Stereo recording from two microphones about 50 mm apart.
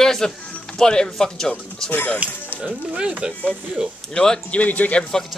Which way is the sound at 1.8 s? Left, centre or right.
Left.